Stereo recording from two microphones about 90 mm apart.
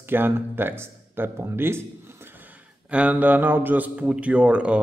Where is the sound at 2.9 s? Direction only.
15° right (ahead or behind).